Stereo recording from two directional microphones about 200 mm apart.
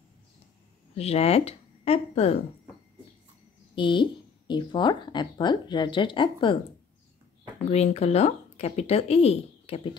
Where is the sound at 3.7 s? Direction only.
25° left (ahead or behind).